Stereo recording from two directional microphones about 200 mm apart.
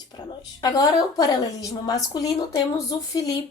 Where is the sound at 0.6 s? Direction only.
20° left (ahead or behind).